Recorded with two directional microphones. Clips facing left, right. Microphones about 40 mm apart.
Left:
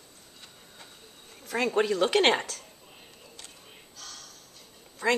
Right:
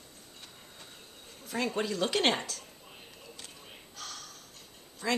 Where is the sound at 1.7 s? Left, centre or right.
Left.